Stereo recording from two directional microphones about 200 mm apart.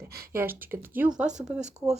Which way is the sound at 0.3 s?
10° right (ahead or behind).